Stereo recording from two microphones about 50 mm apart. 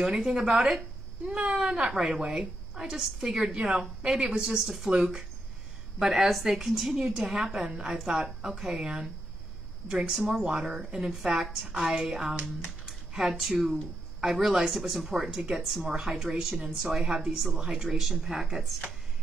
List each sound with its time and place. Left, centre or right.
0.0 s a woman's voice: centre
5.9 s a woman's voice: centre
7.6 s a woman's voice: centre
12.4 s a woman's voice: centre
12.8 s a woman's voice: centre